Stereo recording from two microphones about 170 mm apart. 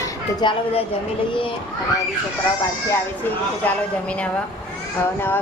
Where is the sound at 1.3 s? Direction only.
30° left (ahead or behind).